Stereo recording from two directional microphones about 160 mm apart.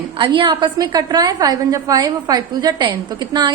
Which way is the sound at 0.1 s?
30° right (ahead or behind).